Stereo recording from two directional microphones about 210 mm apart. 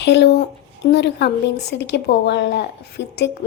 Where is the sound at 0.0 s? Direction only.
55° left (ahead or behind).